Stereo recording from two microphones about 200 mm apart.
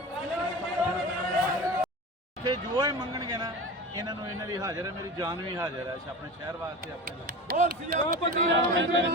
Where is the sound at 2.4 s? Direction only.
20° right (ahead or behind).